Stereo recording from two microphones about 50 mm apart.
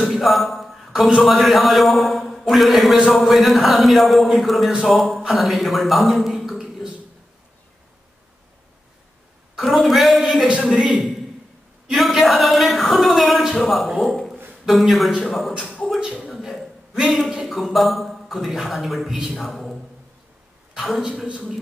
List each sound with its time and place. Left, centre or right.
0.1 s a man's voice: centre
9.8 s a man's voice: centre
11.9 s speech: centre
16.0 s a sound: centre
16.3 s a sound: centre
17.3 s a man's voice: centre
20.8 s speech: centre